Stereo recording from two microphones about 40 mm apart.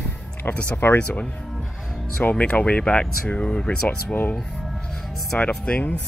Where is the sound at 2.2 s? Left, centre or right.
Left.